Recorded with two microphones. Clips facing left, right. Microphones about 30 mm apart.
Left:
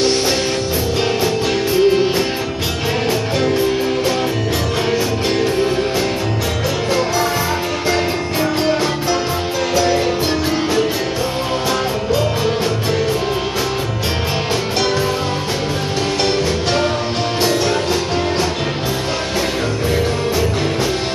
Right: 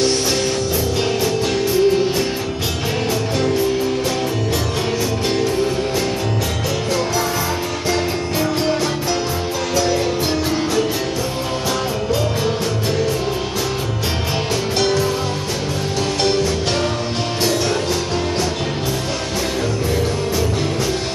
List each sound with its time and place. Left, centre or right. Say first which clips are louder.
1.2 s music: left 1 dB; left
3.3 s music: left 1 dB; centre
9.8 s music: left 2 dB; centre